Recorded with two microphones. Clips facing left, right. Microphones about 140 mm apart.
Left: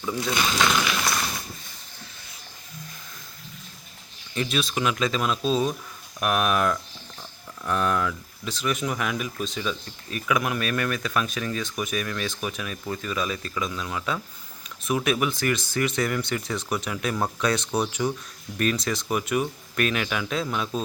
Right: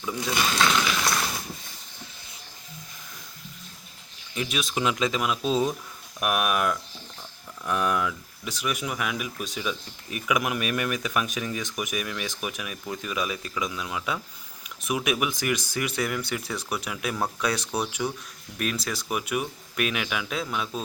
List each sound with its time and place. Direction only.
0.3 s speech: 5° left (ahead or behind)
4.4 s speech: 10° right (ahead or behind)